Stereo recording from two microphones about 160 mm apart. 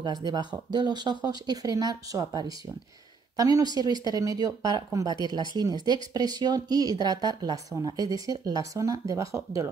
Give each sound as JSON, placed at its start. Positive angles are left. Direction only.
{"t": 0.0, "sound": "a woman's voice", "side_deg": -25}